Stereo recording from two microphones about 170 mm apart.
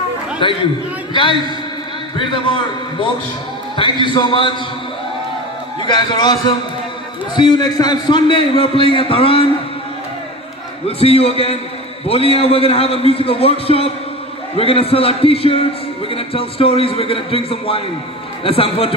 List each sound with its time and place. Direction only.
0.4 s a man's voice: 30° left (ahead or behind)
2.1 s a man's voice: 30° left (ahead or behind)
3.7 s a man's voice: 30° left (ahead or behind)
5.8 s a man's voice: 25° left (ahead or behind)
10.9 s a man's voice: 35° left (ahead or behind)